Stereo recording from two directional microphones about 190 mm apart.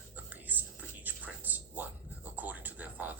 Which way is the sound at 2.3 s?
10° right (ahead or behind).